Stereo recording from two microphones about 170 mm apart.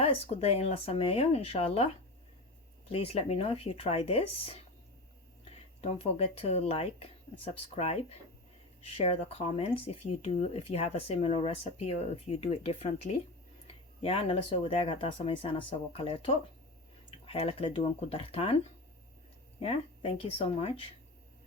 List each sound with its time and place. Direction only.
0.0 s speech: 35° left (ahead or behind)
2.9 s speech: 35° left (ahead or behind)
5.8 s speech: 35° left (ahead or behind)
19.5 s speech: 35° left (ahead or behind)